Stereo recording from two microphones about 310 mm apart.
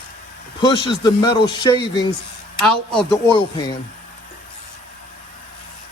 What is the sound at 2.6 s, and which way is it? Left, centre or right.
Speech, centre.